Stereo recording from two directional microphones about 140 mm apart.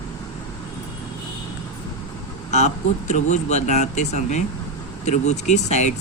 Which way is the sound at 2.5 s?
55° left (ahead or behind).